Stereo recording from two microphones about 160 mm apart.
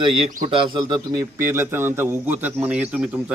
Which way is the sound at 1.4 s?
15° right (ahead or behind).